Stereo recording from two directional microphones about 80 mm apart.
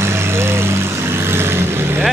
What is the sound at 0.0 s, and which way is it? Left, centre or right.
Vehicle, right.